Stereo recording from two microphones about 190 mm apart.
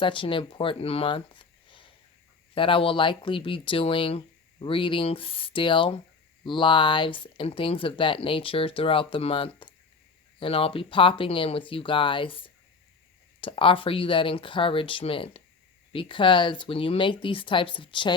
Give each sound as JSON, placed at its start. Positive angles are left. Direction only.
{"t": 0.0, "sound": "speech", "side_deg": 25}